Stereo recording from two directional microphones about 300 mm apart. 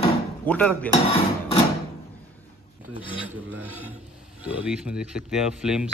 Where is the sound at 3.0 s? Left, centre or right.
Centre.